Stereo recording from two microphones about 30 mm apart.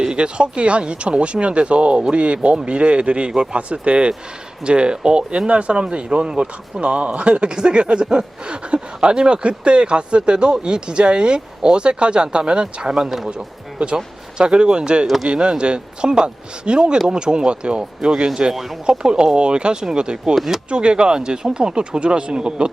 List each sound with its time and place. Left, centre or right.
0.0 s speech: right
5.7 s speech: right
6.9 s speech: right
20.3 s speech: centre
20.7 s speech: right